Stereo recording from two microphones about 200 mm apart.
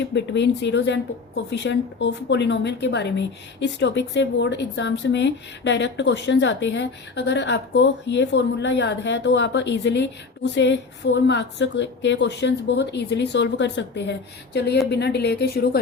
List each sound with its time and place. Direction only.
0.1 s a woman's voice: 60° left (ahead or behind)